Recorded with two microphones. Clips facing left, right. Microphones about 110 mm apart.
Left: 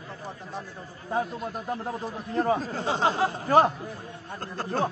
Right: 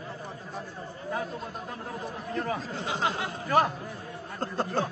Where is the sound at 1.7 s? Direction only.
30° left (ahead or behind).